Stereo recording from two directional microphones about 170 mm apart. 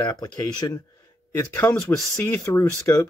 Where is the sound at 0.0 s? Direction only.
25° left (ahead or behind).